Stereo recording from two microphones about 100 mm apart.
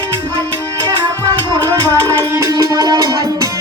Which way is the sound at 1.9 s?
25° right (ahead or behind).